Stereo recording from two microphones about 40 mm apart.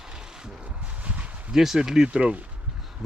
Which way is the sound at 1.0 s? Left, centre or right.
Right.